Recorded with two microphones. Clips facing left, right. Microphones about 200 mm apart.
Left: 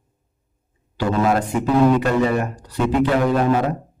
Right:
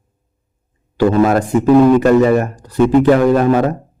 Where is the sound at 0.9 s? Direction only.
45° right (ahead or behind).